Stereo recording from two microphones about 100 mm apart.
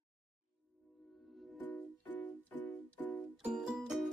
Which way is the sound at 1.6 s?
15° left (ahead or behind).